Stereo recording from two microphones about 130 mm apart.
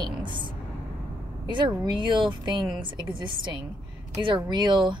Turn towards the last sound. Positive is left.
turn(degrees=-35)  # may be behind; listen again after turning